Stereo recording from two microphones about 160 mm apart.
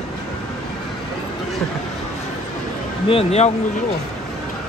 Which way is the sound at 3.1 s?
40° left (ahead or behind).